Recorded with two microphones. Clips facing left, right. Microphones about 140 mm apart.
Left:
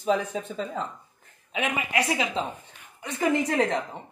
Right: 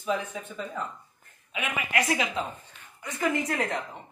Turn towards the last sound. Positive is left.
turn(degrees=30)  # may be behind; listen again after turning